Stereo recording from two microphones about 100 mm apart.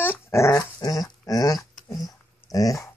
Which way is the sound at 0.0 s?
25° left (ahead or behind).